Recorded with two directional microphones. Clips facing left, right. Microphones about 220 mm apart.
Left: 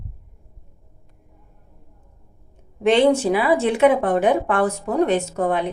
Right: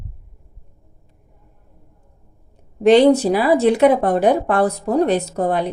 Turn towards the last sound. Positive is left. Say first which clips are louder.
# right 2 dB
turn(degrees=-35)  # may be behind; listen again after turning